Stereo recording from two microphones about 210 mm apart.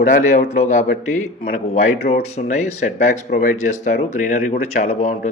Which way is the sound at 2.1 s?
35° left (ahead or behind).